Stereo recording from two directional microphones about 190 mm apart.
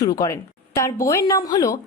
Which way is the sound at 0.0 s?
20° left (ahead or behind).